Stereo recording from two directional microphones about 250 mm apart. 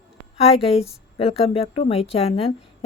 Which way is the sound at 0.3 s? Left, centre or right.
Left.